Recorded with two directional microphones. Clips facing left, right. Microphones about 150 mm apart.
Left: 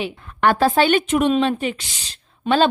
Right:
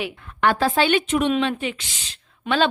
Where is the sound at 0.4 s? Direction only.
45° left (ahead or behind).